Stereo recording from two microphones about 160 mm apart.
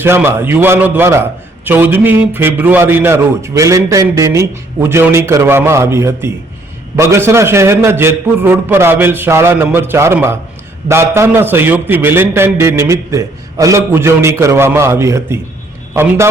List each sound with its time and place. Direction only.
0.0 s a man's voice: 15° right (ahead or behind)